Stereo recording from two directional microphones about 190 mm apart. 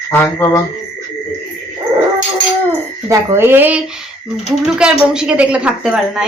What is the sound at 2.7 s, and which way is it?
A child's voice, 15° right (ahead or behind).